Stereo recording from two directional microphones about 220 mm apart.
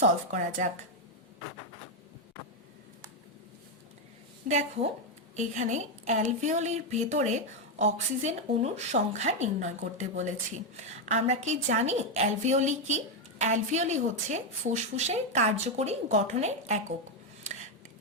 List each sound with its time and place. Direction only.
0.0 s a woman's voice: 35° right (ahead or behind)
4.4 s a woman's voice: 30° right (ahead or behind)